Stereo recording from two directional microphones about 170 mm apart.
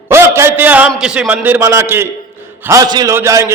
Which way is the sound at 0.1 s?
15° right (ahead or behind).